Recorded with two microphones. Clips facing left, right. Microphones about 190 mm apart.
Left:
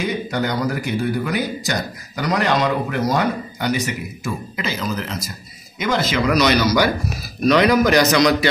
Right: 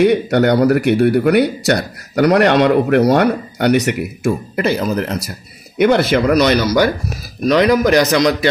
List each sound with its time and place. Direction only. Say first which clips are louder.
0.0 s a man's voice: right 10 dB; 70° right (ahead or behind); by 8.5 s 50° right (ahead or behind)